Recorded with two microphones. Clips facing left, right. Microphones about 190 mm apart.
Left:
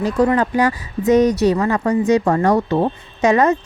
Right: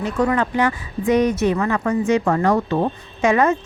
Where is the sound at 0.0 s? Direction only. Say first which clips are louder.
Left 3 dB; 35° left (ahead or behind).